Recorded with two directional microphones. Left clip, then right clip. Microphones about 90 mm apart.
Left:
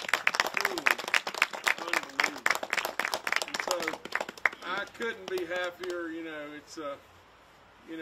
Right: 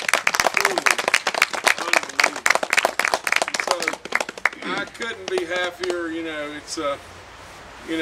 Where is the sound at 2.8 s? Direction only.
25° right (ahead or behind).